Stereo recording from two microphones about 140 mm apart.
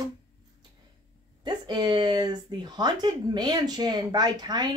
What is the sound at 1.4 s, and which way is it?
Speech, 30° right (ahead or behind).